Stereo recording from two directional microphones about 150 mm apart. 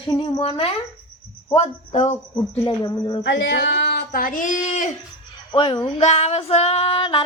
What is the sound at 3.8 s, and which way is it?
Speech, 85° left.